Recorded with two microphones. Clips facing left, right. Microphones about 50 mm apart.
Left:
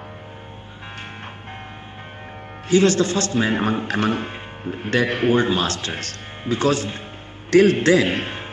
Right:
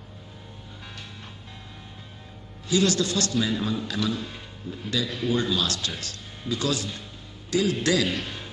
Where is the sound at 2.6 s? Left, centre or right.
Left.